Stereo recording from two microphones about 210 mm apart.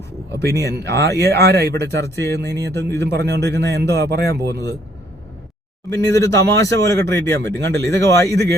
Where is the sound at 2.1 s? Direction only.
15° left (ahead or behind).